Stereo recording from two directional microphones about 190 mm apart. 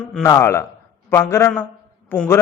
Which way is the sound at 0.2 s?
15° left (ahead or behind).